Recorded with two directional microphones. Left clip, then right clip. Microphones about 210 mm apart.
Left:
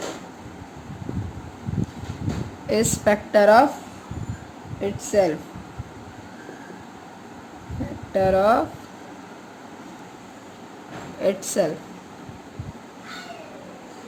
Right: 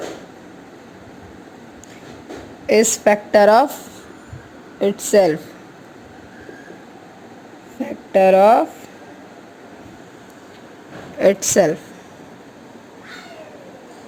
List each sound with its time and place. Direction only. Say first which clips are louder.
2.6 s a woman's voice: right 6 dB; 25° right (ahead or behind)
4.8 s speech: right 6 dB; 40° right (ahead or behind)
8.1 s a woman's voice: right 7 dB; 25° right (ahead or behind)
11.2 s speech: right 8 dB; 35° right (ahead or behind)